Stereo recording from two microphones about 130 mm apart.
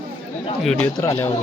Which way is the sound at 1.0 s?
20° left (ahead or behind).